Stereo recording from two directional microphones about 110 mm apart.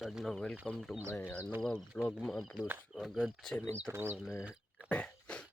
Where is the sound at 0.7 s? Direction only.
5° left (ahead or behind).